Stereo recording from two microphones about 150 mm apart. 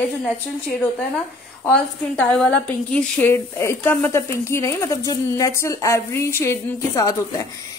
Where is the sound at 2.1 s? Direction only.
5° left (ahead or behind).